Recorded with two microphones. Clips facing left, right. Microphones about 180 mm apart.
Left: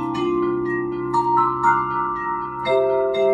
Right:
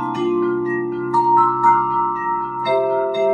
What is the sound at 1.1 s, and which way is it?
Music, 10° left (ahead or behind).